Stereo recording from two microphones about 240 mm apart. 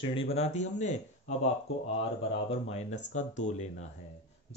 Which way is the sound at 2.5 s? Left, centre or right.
Left.